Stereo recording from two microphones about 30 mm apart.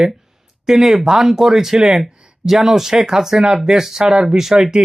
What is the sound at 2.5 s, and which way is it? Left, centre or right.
Speech, centre.